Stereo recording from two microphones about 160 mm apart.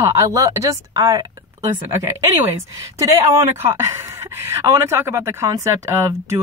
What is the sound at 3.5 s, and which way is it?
Speech, 15° right (ahead or behind).